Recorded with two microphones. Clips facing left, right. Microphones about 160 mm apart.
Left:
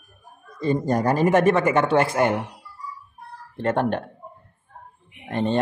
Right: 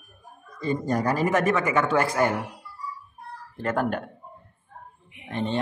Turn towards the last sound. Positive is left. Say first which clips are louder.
# left 5 dB
turn(degrees=45)  # may be behind; listen again after turning